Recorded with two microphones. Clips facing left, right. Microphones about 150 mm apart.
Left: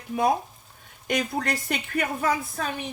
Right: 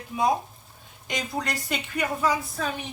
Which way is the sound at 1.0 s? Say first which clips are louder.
Left 4 dB; 55° left (ahead or behind).